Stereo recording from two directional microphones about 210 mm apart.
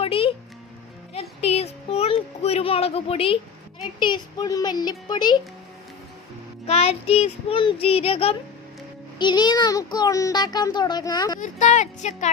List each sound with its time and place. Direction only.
0.0 s music: 25° left (ahead or behind)
1.1 s a sound: 30° left (ahead or behind)
4.0 s speech: 20° left (ahead or behind)
6.7 s speech: 30° left (ahead or behind)
11.3 s speech: 35° left (ahead or behind)